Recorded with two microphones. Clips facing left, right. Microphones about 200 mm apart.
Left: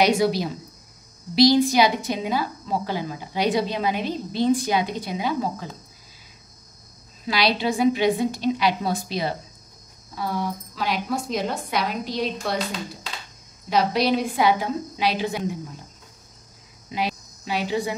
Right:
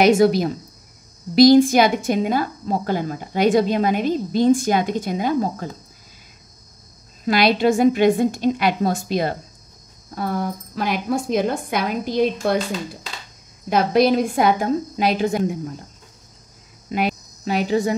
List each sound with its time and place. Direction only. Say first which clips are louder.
0.0 s a woman's voice: right 5 dB; 50° right (ahead or behind)
7.2 s a woman's voice: right 6 dB; 50° right (ahead or behind)
13.7 s a woman's voice: right 5 dB; 50° right (ahead or behind)
16.9 s speech: right 5 dB; 50° right (ahead or behind)